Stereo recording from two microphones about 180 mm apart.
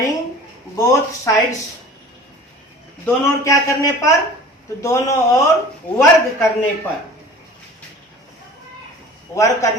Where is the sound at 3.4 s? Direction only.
20° left (ahead or behind).